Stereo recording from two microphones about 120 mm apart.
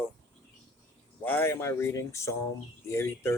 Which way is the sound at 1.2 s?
15° left (ahead or behind).